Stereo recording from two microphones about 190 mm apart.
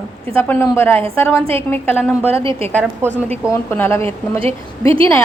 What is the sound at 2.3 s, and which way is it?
Speech, 30° right (ahead or behind).